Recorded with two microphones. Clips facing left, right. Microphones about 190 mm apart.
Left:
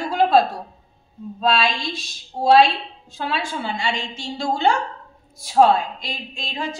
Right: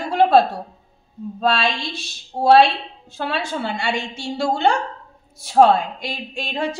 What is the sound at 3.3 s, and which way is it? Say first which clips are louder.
A woman's voice: right 1 dB; 60° right (ahead or behind).